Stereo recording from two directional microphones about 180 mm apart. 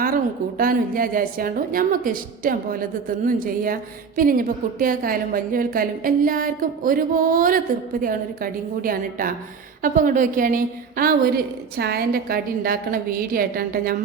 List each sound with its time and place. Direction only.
0.0 s a woman's voice: 50° right (ahead or behind)